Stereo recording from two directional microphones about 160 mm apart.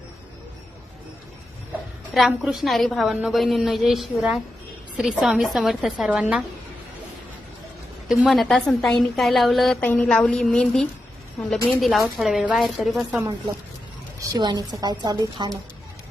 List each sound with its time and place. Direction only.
2.1 s a woman's voice: centre (ahead or behind)
8.0 s a woman's voice: centre (ahead or behind)
14.2 s a woman's voice: 25° right (ahead or behind)